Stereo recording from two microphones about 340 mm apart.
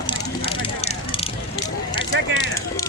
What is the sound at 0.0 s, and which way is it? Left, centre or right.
Bicycle, centre.